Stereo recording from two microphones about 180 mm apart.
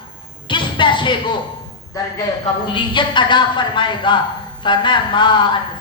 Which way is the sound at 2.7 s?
25° left (ahead or behind).